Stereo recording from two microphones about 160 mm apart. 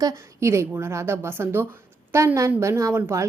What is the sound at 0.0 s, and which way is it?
A woman's voice, 20° right (ahead or behind).